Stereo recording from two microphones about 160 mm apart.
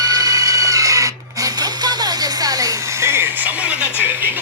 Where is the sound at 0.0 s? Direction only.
25° right (ahead or behind); by 3.8 s 10° right (ahead or behind).